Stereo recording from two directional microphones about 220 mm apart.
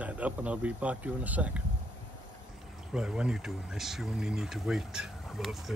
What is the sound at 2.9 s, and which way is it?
Speech, 5° right (ahead or behind).